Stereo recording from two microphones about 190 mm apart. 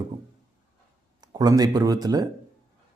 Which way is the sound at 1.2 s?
20° right (ahead or behind).